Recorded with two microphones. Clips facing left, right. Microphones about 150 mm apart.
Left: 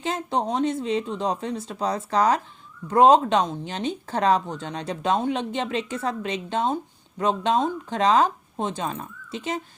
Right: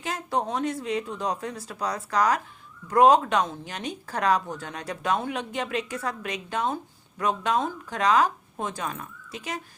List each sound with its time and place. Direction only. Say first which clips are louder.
0.0 s speech: left 3 dB; 25° left (ahead or behind)